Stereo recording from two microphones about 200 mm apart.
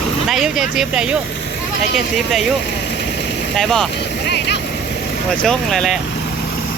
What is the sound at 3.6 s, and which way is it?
Speech, centre (ahead or behind).